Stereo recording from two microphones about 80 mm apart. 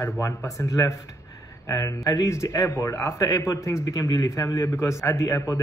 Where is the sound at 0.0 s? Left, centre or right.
Left.